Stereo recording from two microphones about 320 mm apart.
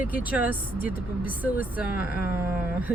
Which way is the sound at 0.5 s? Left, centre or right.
Left.